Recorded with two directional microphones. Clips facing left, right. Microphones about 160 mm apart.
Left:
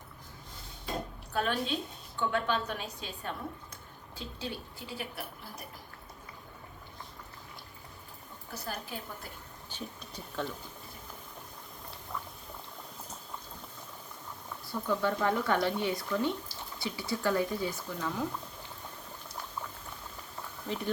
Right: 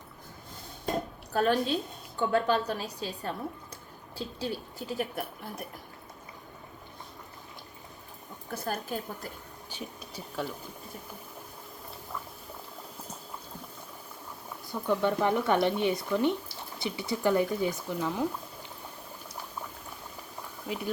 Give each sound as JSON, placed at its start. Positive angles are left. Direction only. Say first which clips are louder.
{"t": 1.3, "sound": "a woman's voice", "louder": "right 6 dB", "side_deg": -40}
{"t": 4.4, "sound": "a woman's voice", "louder": "right 5 dB", "side_deg": -45}
{"t": 8.5, "sound": "a woman's voice", "louder": "right 6 dB", "side_deg": -50}
{"t": 9.6, "sound": "speech", "louder": "right 1 dB", "side_deg": -10}
{"t": 14.7, "sound": "speech", "louder": "right 3 dB", "side_deg": -15}
{"t": 20.7, "sound": "speech", "louder": "right 1 dB", "side_deg": -10}